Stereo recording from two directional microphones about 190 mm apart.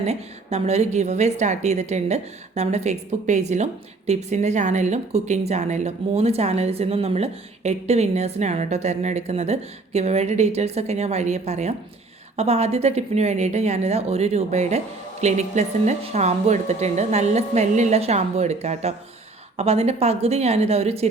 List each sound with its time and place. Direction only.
0.0 s a woman's voice: 35° right (ahead or behind)